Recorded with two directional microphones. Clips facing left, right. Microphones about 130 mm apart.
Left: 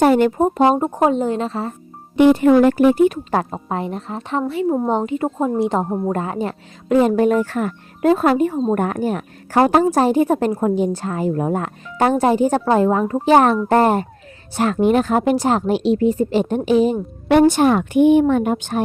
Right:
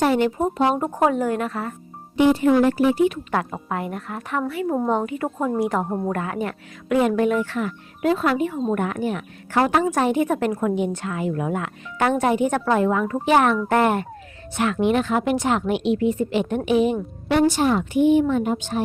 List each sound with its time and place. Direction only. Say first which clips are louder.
0.0 s a woman's voice: left 5 dB; 45° left (ahead or behind)
0.8 s a woman's voice: left 3 dB; 25° left (ahead or behind)
2.1 s a woman's voice: left 5 dB; 60° left (ahead or behind)
3.5 s a woman's voice: left 3 dB; 30° left (ahead or behind)
17.2 s a woman's voice: left 6 dB; 55° left (ahead or behind)